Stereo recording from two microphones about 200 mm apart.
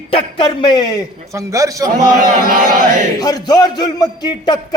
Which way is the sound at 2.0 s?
45° right (ahead or behind).